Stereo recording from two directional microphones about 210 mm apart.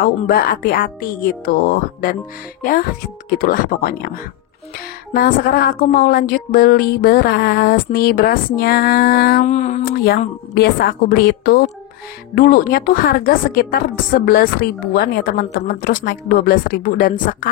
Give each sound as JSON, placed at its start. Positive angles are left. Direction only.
{"t": 0.0, "sound": "a woman's voice", "side_deg": 45}
{"t": 3.3, "sound": "a woman's voice", "side_deg": 45}
{"t": 10.0, "sound": "a woman's voice", "side_deg": 50}